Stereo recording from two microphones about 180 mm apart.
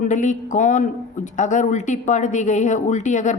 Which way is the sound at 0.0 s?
45° left (ahead or behind).